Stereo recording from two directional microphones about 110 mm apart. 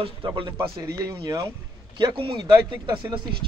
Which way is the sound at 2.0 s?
50° right (ahead or behind).